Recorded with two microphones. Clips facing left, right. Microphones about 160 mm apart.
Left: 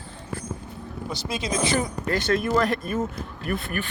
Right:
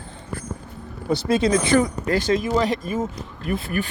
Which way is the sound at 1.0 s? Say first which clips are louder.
Right 10 dB; 60° right (ahead or behind).